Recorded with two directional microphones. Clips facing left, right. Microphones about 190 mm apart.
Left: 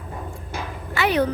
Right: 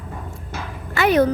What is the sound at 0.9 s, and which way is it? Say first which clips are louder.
Speech: right 4 dB; 45° right (ahead or behind).